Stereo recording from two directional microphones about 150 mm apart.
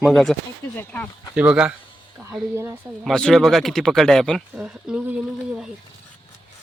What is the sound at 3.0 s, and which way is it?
Speech, 5° left (ahead or behind).